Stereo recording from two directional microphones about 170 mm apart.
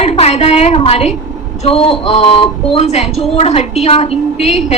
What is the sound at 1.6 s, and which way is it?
A woman's voice, 35° left (ahead or behind).